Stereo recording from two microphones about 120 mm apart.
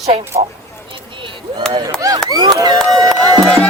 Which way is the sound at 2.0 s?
30° right (ahead or behind).